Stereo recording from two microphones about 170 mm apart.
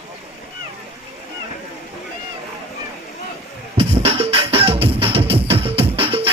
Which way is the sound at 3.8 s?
35° right (ahead or behind).